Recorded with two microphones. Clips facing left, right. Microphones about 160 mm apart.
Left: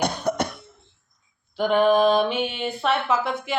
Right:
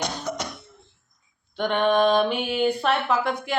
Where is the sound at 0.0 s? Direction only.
55° left (ahead or behind).